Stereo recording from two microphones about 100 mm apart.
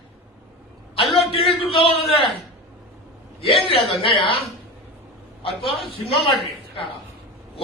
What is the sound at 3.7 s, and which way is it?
Speech, 65° left (ahead or behind).